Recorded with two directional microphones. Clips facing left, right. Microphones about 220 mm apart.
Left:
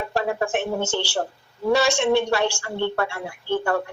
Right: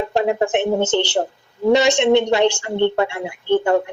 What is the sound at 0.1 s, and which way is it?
Speech, 20° right (ahead or behind).